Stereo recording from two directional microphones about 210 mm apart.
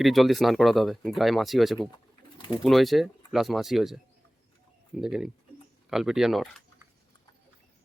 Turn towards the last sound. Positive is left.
turn(degrees=0)  # may be behind; listen again after turning